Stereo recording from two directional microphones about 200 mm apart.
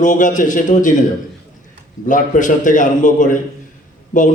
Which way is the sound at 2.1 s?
40° left (ahead or behind).